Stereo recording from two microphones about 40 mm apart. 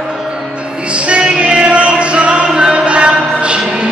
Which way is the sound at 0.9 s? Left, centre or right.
Right.